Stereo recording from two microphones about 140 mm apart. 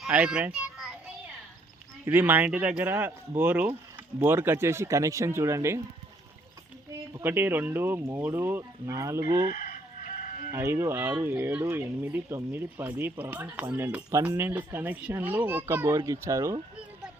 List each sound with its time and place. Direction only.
0.0 s children playing: 5° right (ahead or behind)
2.0 s speech: 15° right (ahead or behind)
7.1 s speech: 15° right (ahead or behind)
9.5 s chicken: 75° left (ahead or behind)
10.5 s speech: 15° right (ahead or behind)